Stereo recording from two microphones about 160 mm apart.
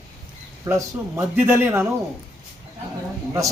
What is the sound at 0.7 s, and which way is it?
A man's voice, 15° right (ahead or behind).